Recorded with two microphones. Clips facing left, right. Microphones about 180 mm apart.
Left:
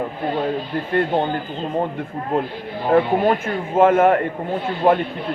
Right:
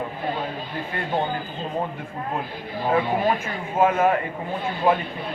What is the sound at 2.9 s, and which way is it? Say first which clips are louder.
Speech: left 6 dB; 55° left (ahead or behind).